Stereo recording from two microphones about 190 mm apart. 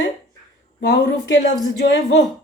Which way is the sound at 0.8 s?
60° left (ahead or behind).